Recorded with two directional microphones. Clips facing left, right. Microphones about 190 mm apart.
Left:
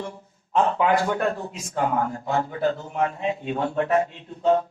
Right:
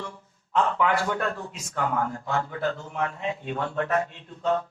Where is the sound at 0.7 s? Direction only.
20° left (ahead or behind).